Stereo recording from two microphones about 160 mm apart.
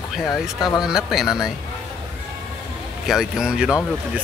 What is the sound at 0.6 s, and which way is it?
Speech, 25° left (ahead or behind).